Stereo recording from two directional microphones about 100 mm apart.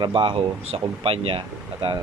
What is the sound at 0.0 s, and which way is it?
Speech, 55° right (ahead or behind).